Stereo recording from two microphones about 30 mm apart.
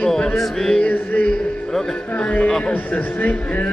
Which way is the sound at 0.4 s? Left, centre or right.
Centre.